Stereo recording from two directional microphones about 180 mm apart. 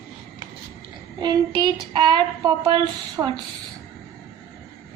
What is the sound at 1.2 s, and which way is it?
Speech, 25° right (ahead or behind).